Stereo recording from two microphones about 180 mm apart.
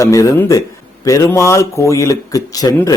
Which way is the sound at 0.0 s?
15° left (ahead or behind).